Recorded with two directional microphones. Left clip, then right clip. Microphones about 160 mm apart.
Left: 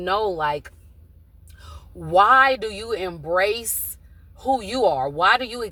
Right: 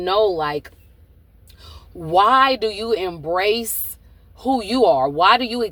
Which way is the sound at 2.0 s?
30° right (ahead or behind).